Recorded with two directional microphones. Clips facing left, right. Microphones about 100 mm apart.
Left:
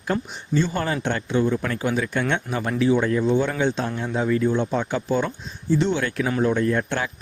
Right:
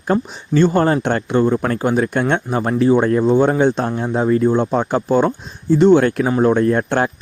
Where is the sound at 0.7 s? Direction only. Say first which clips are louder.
Right 9 dB; 45° right (ahead or behind).